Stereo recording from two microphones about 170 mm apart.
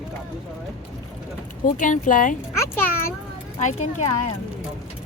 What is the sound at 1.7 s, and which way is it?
Speech, 50° left (ahead or behind).